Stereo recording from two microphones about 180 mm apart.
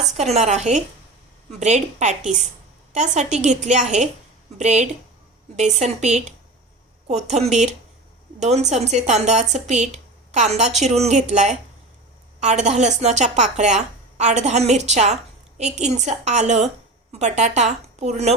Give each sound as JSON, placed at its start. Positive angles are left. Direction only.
{"t": 0.2, "sound": "speech", "side_deg": -40}